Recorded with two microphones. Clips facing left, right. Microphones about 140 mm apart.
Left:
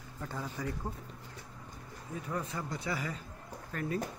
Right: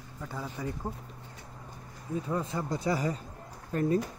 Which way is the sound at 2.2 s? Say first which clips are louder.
Right 3 dB; 30° right (ahead or behind).